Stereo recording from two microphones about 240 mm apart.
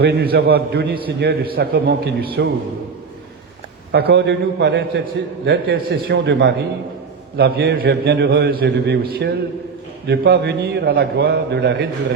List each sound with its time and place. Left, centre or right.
0.0 s a man's voice: right
3.9 s a man's voice: right